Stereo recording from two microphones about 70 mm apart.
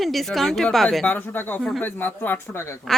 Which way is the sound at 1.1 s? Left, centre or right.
Left.